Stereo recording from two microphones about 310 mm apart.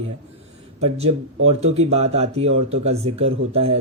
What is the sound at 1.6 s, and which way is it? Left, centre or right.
Speech, centre.